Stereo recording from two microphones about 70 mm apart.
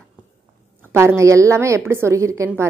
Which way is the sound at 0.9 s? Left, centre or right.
Right.